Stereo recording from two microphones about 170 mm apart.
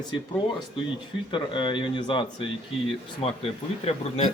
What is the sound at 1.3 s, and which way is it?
Speech, 30° left (ahead or behind).